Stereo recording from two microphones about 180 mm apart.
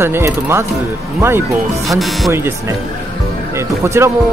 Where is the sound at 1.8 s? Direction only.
Centre (ahead or behind).